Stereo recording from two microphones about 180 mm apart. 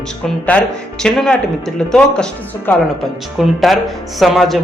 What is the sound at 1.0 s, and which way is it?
Speech, 5° left (ahead or behind).